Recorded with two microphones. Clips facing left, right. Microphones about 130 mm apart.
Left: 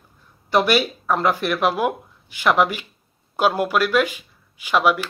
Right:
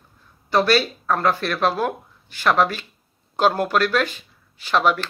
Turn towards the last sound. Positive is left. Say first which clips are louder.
# left 1 dB
turn(degrees=10)  # may be behind; listen again after turning